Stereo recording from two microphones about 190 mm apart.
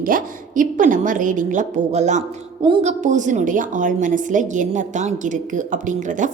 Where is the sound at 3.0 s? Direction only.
40° right (ahead or behind).